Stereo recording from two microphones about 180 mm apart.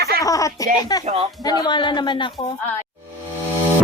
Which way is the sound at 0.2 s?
20° left (ahead or behind).